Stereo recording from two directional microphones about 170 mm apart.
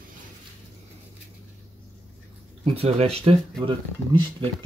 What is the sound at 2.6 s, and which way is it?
Speech, 35° right (ahead or behind).